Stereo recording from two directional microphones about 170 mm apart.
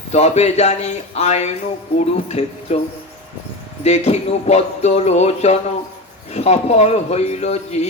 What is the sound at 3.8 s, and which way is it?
Speech, 40° left (ahead or behind).